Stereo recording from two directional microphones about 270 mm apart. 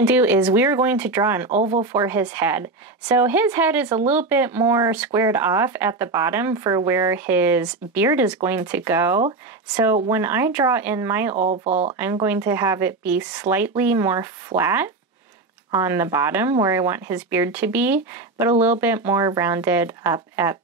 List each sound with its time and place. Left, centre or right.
0.0 s speech: centre
11.3 s speech: right
12.0 s speech: centre